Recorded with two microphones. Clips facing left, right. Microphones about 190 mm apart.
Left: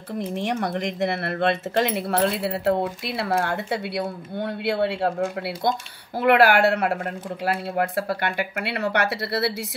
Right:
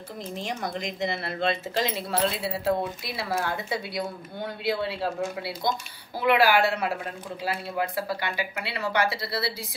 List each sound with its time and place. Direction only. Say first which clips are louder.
0.2 s speech: left 6 dB; 65° left (ahead or behind)